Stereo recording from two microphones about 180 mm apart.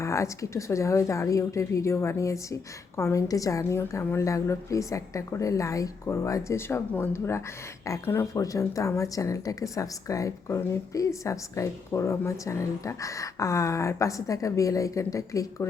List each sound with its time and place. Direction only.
0.0 s a woman's voice: 15° left (ahead or behind)